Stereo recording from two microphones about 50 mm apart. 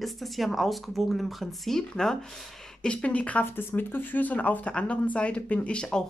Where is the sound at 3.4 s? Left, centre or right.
Left.